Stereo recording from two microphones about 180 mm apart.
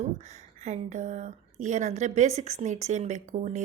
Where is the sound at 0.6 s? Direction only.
40° right (ahead or behind).